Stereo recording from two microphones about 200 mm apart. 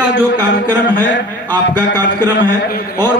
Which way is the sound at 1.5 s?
20° right (ahead or behind).